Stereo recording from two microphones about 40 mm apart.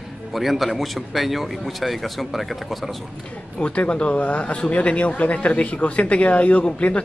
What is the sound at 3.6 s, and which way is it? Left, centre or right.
Speech, left.